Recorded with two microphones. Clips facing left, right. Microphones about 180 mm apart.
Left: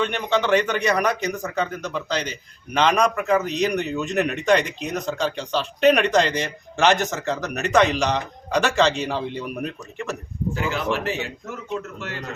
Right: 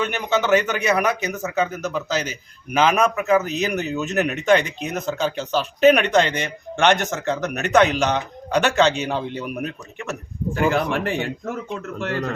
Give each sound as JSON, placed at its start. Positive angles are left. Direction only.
{"t": 0.0, "sound": "a man's voice", "side_deg": -5}
{"t": 10.5, "sound": "a man's voice", "side_deg": -55}